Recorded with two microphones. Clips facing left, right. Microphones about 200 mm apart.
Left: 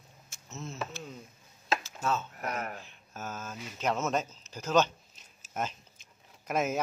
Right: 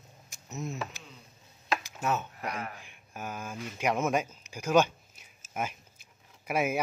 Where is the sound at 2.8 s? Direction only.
15° right (ahead or behind).